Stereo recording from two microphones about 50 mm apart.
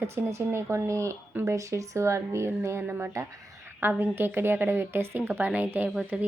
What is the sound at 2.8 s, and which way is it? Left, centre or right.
A woman's voice, right.